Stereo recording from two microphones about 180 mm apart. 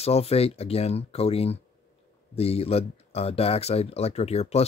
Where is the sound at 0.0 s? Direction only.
35° left (ahead or behind).